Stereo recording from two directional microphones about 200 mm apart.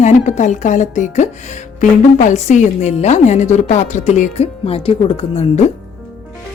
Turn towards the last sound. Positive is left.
turn(degrees=30)  # may be behind; listen again after turning